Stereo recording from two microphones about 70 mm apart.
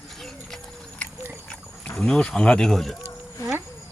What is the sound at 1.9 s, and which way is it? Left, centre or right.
Speech, centre.